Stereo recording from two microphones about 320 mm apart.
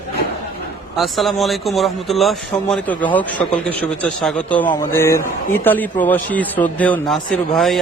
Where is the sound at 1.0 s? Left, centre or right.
Centre.